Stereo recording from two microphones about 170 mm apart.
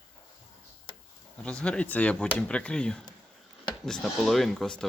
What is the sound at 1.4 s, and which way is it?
Speech, 5° left (ahead or behind).